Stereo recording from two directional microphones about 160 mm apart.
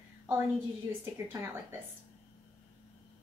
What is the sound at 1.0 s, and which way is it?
Speech, 15° right (ahead or behind).